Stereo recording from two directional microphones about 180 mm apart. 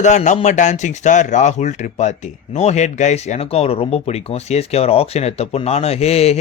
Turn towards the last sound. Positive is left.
turn(degrees=35)  # may be behind; listen again after turning